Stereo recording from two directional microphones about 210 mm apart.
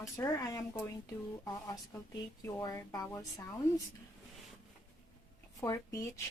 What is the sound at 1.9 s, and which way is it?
Speech, 10° left (ahead or behind).